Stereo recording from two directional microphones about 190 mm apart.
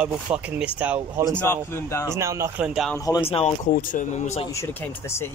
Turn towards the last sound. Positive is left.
turn(degrees=15)  # may be behind; listen again after turning